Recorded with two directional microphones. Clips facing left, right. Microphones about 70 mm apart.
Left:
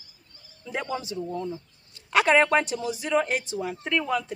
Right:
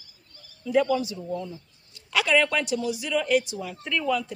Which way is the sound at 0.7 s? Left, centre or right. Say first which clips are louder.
Right 8 dB; left.